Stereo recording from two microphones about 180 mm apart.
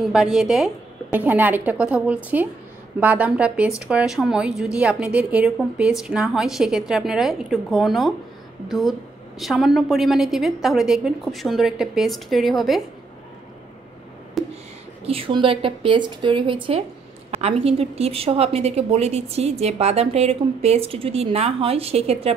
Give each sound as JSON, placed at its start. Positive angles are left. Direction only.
{"t": 0.0, "sound": "a woman's voice", "side_deg": -5}
{"t": 9.4, "sound": "a woman's voice", "side_deg": 0}
{"t": 14.4, "sound": "a sound", "side_deg": 0}
{"t": 15.0, "sound": "a woman's voice", "side_deg": -30}